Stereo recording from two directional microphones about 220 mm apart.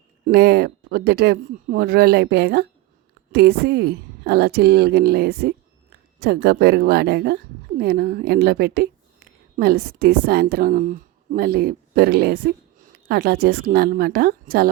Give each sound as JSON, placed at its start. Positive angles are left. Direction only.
{"t": 0.3, "sound": "a woman's voice", "side_deg": -45}